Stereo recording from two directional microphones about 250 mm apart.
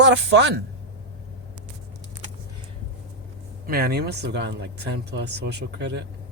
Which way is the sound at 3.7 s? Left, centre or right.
Right.